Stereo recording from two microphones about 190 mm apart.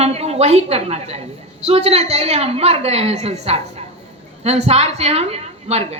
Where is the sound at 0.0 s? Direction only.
35° right (ahead or behind).